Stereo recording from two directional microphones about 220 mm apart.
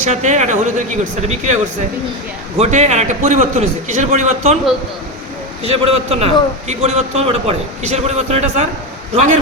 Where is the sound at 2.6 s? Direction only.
30° right (ahead or behind).